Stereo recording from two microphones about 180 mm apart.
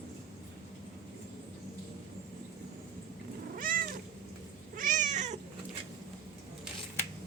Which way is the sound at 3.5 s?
50° right (ahead or behind).